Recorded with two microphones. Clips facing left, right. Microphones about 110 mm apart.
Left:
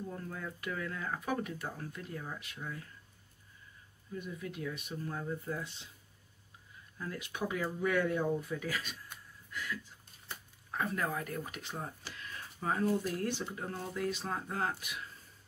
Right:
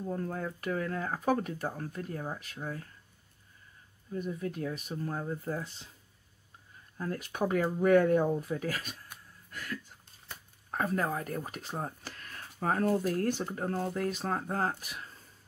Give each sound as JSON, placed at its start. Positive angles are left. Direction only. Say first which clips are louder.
{"t": 0.1, "sound": "speech", "louder": "right 7 dB", "side_deg": -40}
{"t": 4.1, "sound": "speech", "louder": "right 6 dB", "side_deg": -40}
{"t": 7.0, "sound": "speech", "louder": "right 6 dB", "side_deg": -45}